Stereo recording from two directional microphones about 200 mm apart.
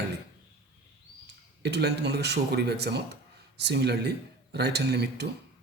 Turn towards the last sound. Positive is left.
turn(degrees=-55)  # may be behind; listen again after turning